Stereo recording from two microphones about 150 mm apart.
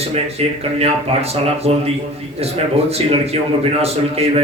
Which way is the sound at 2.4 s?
40° right (ahead or behind).